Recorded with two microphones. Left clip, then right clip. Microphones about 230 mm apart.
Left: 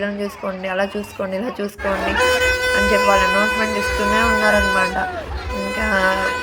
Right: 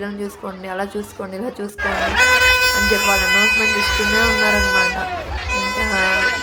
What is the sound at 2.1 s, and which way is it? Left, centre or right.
Music, left.